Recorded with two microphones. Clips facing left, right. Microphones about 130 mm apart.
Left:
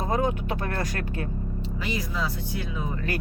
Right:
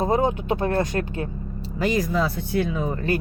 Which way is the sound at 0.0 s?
25° right (ahead or behind).